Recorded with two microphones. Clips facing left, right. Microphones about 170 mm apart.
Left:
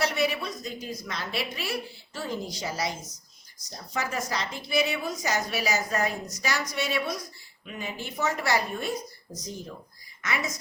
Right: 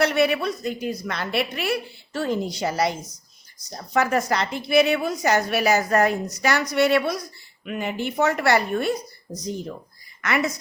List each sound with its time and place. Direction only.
0.0 s a woman's voice: 60° right (ahead or behind)